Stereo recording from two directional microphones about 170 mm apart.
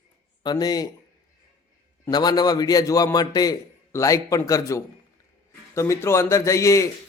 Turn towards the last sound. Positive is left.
turn(degrees=20)  # may be behind; listen again after turning